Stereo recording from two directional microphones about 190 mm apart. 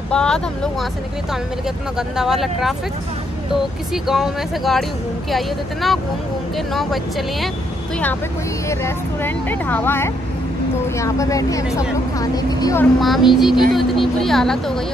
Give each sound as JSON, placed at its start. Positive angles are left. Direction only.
{"t": 0.1, "sound": "speech", "side_deg": 5}
{"t": 2.0, "sound": "speech", "side_deg": 0}
{"t": 3.9, "sound": "speech", "side_deg": 0}
{"t": 8.6, "sound": "speech", "side_deg": 10}
{"t": 13.0, "sound": "speech", "side_deg": 0}